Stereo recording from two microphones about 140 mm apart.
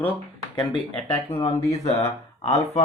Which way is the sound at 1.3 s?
45° left (ahead or behind).